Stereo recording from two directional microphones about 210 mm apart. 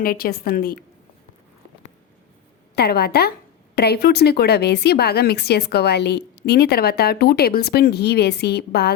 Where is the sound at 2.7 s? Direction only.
50° left (ahead or behind).